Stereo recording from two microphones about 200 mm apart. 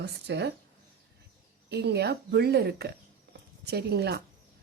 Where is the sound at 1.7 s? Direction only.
55° right (ahead or behind).